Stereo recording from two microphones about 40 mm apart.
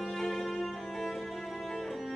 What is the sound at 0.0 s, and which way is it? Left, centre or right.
Music, centre.